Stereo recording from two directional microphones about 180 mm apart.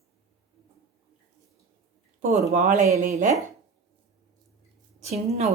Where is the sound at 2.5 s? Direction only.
45° right (ahead or behind).